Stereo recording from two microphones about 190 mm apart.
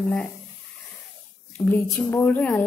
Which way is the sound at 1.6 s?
10° left (ahead or behind).